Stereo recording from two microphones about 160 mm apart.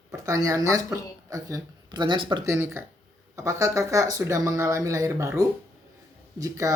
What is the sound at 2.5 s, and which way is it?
Speech, 15° right (ahead or behind).